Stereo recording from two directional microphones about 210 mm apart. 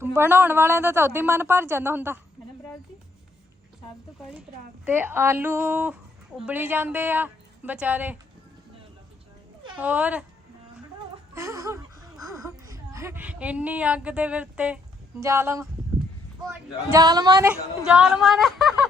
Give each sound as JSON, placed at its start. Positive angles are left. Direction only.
{"t": 0.0, "sound": "a woman's voice", "side_deg": -10}
{"t": 4.2, "sound": "a woman's voice", "side_deg": 0}
{"t": 9.7, "sound": "a woman's voice", "side_deg": -5}
{"t": 11.3, "sound": "a woman's voice", "side_deg": -15}
{"t": 17.5, "sound": "a woman's voice", "side_deg": -5}